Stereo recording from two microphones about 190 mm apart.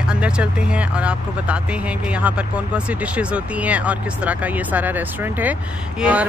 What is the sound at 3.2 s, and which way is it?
Speech, 5° right (ahead or behind).